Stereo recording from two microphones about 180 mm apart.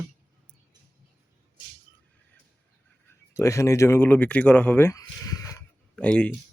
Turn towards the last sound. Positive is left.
turn(degrees=5)  # may be behind; listen again after turning